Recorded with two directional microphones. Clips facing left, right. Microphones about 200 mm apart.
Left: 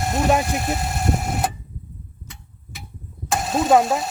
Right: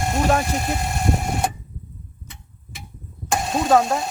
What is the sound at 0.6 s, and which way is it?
Vehicle, centre (ahead or behind).